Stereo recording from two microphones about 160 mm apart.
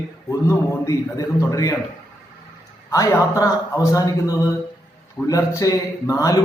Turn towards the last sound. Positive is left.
turn(degrees=20)  # may be behind; listen again after turning